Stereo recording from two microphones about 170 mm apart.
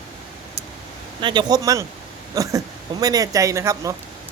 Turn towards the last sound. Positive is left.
turn(degrees=-20)  # may be behind; listen again after turning